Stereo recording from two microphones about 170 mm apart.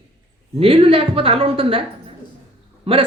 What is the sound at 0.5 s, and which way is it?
A woman's voice, 35° right (ahead or behind).